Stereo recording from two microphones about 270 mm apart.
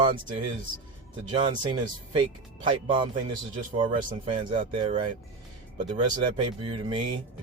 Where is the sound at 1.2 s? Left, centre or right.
Centre.